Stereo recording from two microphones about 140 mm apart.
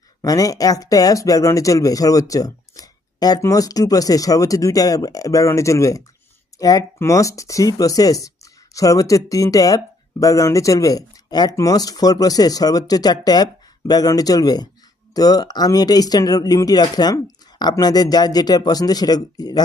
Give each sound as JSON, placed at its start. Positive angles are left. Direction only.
{"t": 0.2, "sound": "speech", "side_deg": 25}